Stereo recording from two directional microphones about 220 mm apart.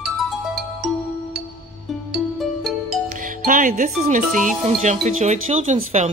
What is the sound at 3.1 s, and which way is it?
Speech, 40° right (ahead or behind).